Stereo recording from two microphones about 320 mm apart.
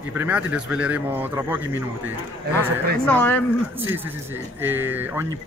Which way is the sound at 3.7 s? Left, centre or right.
Centre.